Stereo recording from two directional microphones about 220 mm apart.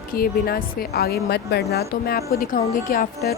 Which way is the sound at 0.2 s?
45° left (ahead or behind).